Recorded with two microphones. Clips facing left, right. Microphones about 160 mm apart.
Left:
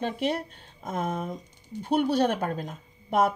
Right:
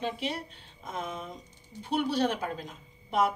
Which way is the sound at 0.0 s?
50° left (ahead or behind).